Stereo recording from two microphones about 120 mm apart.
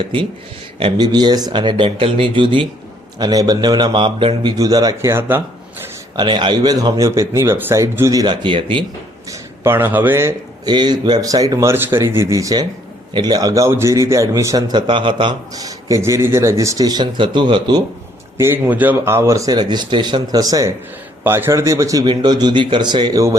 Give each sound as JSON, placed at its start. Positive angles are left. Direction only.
{"t": 0.8, "sound": "speech", "side_deg": -45}
{"t": 3.2, "sound": "speech", "side_deg": -35}
{"t": 4.5, "sound": "speech", "side_deg": -30}
{"t": 6.1, "sound": "speech", "side_deg": -40}
{"t": 9.3, "sound": "speech", "side_deg": -20}
{"t": 10.7, "sound": "speech", "side_deg": -40}
{"t": 15.5, "sound": "speech", "side_deg": -30}
{"t": 18.3, "sound": "speech", "side_deg": -20}
{"t": 22.0, "sound": "speech", "side_deg": -40}